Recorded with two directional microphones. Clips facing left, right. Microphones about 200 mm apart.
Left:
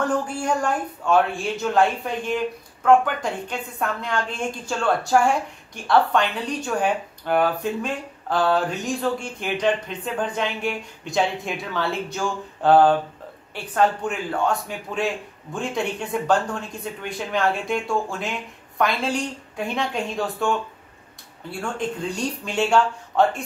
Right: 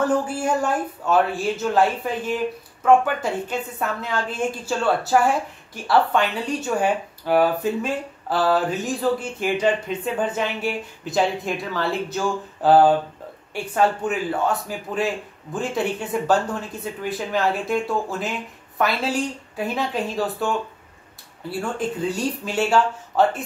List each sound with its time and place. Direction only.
0.0 s speech: 5° right (ahead or behind)